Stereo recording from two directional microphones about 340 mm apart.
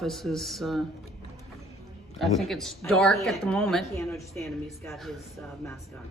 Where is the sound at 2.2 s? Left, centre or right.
Centre.